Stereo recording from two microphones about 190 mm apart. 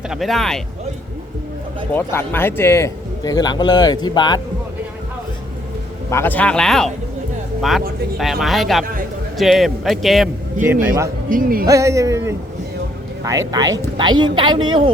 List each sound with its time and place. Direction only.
0.1 s speech: centre (ahead or behind)
1.9 s speech: 10° left (ahead or behind)
6.1 s speech: 10° left (ahead or behind)
8.2 s speech: centre (ahead or behind)
10.6 s speech: 15° right (ahead or behind)
11.3 s speech: 50° right (ahead or behind)
11.6 s speech: 15° right (ahead or behind)
13.5 s speech: 20° right (ahead or behind)